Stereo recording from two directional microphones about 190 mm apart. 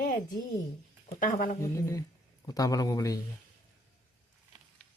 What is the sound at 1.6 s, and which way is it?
A man's voice, 15° left (ahead or behind).